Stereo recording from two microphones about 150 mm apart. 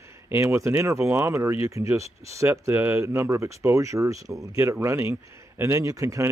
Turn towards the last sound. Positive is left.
turn(degrees=-20)  # may be behind; listen again after turning